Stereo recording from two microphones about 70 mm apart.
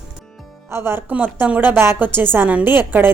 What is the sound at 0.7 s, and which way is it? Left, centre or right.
Speech, right.